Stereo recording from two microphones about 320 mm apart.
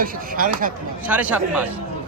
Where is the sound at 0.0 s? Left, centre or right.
Right.